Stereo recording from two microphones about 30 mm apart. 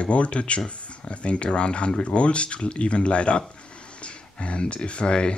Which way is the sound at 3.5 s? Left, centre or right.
Left.